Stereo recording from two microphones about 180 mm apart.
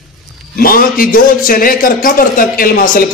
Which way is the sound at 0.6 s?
50° left (ahead or behind).